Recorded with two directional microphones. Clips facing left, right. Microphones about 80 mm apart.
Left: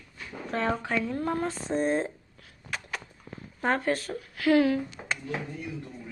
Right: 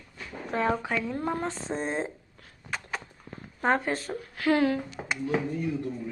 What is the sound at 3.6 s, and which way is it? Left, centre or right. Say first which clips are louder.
A woman's voice: right 1 dB; right.